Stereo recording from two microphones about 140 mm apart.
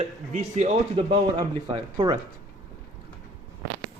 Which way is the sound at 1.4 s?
35° right (ahead or behind).